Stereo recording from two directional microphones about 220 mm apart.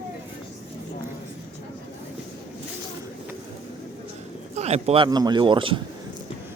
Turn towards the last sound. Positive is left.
turn(degrees=-20)  # may be behind; listen again after turning